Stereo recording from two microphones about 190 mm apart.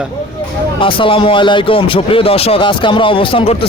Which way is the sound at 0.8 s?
25° left (ahead or behind).